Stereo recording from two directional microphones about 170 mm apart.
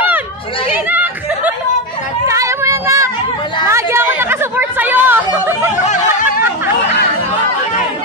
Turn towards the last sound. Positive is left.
turn(degrees=50)  # may be behind; listen again after turning